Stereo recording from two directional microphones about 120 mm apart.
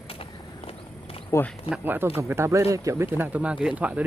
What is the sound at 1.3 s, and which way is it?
Speech, 25° left (ahead or behind).